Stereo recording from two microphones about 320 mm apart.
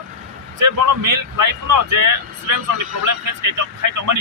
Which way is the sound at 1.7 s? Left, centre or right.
Right.